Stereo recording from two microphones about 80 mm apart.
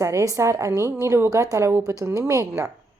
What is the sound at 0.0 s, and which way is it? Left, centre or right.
A woman's voice, right.